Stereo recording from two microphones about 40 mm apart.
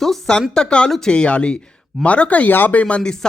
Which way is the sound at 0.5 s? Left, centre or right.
Left.